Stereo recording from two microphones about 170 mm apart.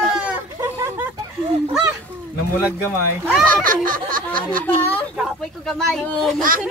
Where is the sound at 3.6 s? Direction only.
55° right (ahead or behind).